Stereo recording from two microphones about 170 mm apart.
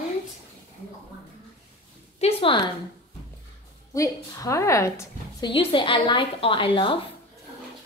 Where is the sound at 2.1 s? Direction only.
35° left (ahead or behind).